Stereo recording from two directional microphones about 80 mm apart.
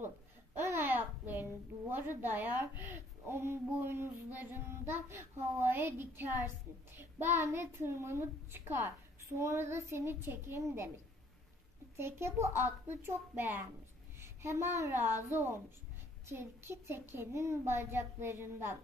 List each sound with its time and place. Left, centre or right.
0.6 s a sound: right
3.7 s child singing: right
7.0 s a child's voice: right
12.0 s a child's voice: right